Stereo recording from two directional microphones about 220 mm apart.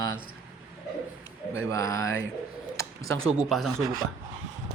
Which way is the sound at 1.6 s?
15° left (ahead or behind).